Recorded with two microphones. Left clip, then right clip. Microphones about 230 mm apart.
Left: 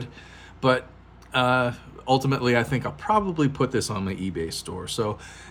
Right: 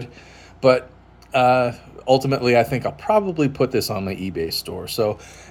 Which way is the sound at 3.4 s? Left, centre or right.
Centre.